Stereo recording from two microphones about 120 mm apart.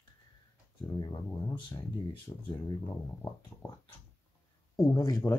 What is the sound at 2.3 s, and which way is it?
Speech, 35° left (ahead or behind).